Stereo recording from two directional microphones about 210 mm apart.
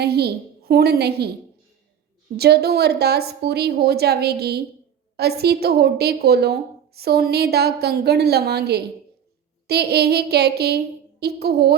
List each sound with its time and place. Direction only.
0.0 s a woman's voice: 50° right (ahead or behind)